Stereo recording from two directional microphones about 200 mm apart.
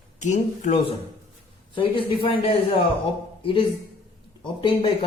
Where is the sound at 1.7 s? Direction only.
25° left (ahead or behind).